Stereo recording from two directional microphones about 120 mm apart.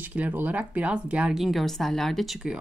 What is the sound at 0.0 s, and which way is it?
A woman's voice, 15° right (ahead or behind).